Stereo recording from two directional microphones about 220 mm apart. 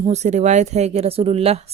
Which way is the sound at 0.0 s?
30° right (ahead or behind).